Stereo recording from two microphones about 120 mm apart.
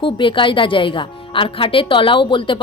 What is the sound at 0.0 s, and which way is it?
Speech, 45° left (ahead or behind).